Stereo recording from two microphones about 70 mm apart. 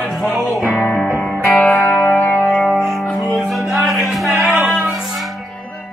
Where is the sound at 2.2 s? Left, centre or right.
Left.